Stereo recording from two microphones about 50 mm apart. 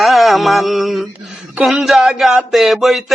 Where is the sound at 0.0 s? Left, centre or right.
Centre.